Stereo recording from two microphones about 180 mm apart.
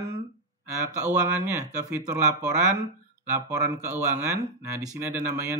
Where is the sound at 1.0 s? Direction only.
40° right (ahead or behind).